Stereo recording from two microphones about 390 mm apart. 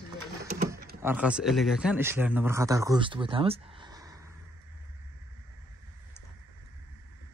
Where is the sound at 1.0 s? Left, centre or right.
Centre.